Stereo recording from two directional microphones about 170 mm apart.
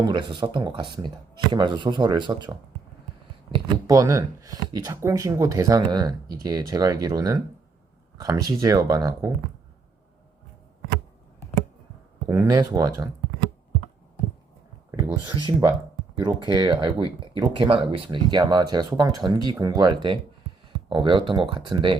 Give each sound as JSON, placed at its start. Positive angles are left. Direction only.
{"t": 0.0, "sound": "speech", "side_deg": -30}
{"t": 12.3, "sound": "speech", "side_deg": -20}
{"t": 15.1, "sound": "speech", "side_deg": -25}